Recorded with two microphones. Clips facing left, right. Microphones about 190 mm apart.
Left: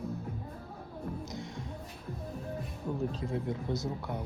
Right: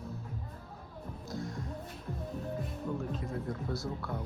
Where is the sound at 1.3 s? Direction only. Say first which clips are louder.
Right 2 dB; 25° left (ahead or behind).